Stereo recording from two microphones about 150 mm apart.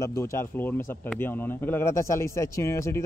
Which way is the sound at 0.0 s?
20° left (ahead or behind).